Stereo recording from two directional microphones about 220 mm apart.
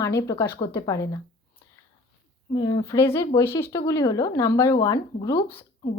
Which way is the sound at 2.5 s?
20° left (ahead or behind).